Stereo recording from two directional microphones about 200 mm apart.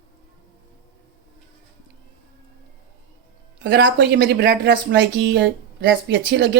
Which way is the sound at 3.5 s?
60° right (ahead or behind).